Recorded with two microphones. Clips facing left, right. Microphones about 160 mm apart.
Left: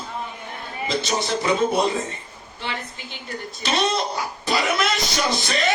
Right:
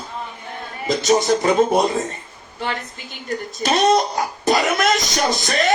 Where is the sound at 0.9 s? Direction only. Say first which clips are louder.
Right 8 dB; 45° right (ahead or behind).